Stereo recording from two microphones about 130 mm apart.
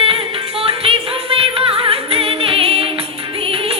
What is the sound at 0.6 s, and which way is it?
Music, 45° right (ahead or behind).